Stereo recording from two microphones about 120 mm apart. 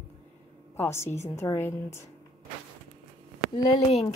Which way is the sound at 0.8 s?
20° left (ahead or behind).